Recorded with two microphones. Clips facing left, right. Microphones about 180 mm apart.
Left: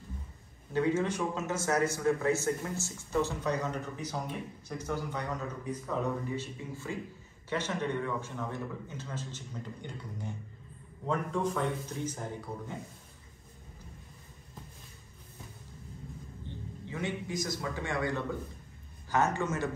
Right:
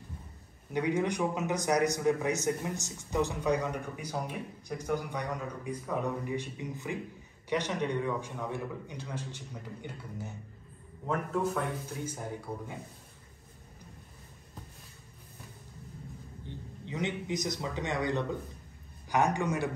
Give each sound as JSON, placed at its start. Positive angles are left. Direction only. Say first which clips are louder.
{"t": 0.7, "sound": "a man's voice", "louder": "even", "side_deg": -15}
{"t": 16.4, "sound": "a man's voice", "louder": "even", "side_deg": -20}